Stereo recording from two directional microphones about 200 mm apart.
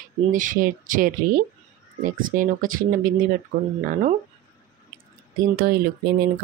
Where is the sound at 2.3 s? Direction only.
45° right (ahead or behind).